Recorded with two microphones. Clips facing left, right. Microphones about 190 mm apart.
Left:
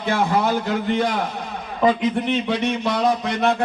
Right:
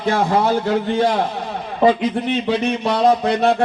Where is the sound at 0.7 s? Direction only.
30° right (ahead or behind).